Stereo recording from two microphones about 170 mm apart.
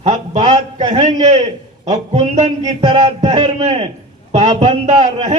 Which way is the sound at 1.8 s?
40° right (ahead or behind).